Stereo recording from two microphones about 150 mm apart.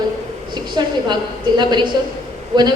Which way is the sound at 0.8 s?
30° right (ahead or behind).